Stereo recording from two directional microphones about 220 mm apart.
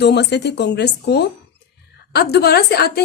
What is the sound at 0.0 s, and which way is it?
A woman's voice, 50° left (ahead or behind).